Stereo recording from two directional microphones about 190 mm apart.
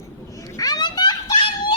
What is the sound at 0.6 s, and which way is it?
Children playing, 20° left (ahead or behind).